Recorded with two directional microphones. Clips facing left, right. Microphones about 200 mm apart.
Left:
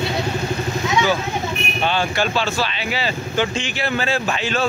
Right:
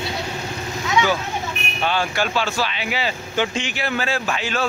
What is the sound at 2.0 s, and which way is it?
Speech, 10° right (ahead or behind).